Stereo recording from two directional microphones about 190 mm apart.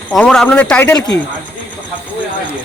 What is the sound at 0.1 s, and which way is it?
Speech, 5° left (ahead or behind).